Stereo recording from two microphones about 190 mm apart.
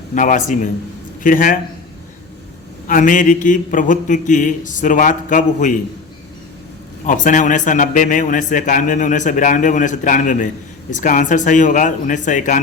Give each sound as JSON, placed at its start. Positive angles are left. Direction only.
{"t": 0.1, "sound": "a man's voice", "side_deg": 40}
{"t": 2.8, "sound": "speech", "side_deg": 45}
{"t": 7.0, "sound": "a man's voice", "side_deg": 40}